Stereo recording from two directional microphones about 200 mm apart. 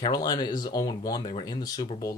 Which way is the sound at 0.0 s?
20° left (ahead or behind).